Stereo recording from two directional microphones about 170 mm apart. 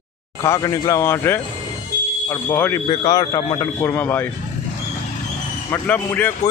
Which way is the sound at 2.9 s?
25° left (ahead or behind).